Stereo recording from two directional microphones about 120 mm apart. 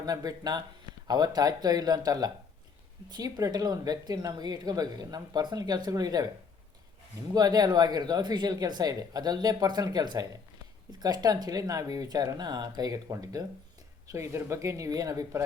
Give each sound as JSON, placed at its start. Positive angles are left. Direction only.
{"t": 0.0, "sound": "speech", "side_deg": -30}
{"t": 7.3, "sound": "speech", "side_deg": -35}